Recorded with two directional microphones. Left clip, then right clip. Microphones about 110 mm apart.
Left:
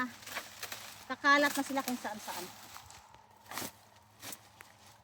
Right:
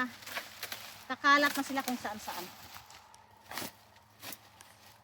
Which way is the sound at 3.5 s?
55° left (ahead or behind).